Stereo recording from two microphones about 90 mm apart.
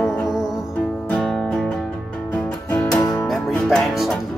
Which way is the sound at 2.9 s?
40° left (ahead or behind).